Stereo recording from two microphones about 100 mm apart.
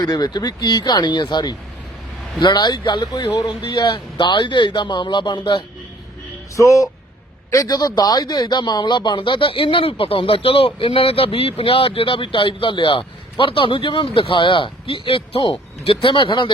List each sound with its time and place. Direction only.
0.0 s speech: 40° left (ahead or behind)
6.6 s speech: 30° left (ahead or behind); by 16.5 s 55° left (ahead or behind)